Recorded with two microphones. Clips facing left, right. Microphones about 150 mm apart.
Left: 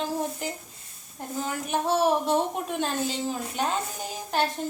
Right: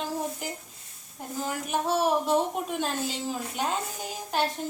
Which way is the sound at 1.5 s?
5° right (ahead or behind).